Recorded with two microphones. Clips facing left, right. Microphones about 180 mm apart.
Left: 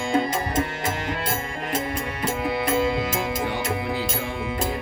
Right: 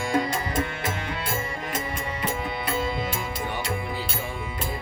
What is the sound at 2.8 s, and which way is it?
Music, 70° left (ahead or behind).